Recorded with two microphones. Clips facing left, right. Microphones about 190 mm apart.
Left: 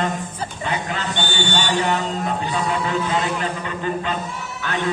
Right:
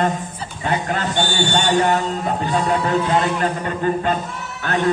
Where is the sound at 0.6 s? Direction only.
50° right (ahead or behind).